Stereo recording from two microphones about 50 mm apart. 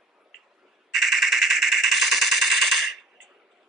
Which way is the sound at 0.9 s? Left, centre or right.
Centre.